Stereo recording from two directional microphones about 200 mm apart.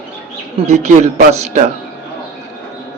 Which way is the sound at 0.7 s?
35° right (ahead or behind).